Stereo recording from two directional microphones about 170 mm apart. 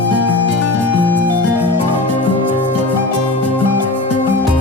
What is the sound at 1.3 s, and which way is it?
Music, 10° right (ahead or behind).